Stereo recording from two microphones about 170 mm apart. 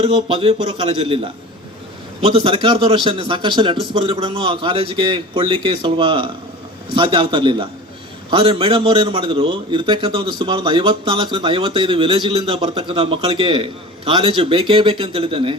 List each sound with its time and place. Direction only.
0.0 s a man's voice: 35° right (ahead or behind)